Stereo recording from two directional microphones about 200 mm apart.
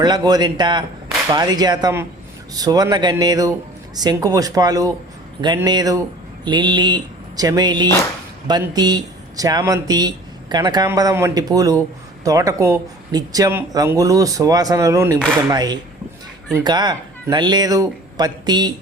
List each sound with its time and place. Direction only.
0.0 s speech: 20° right (ahead or behind)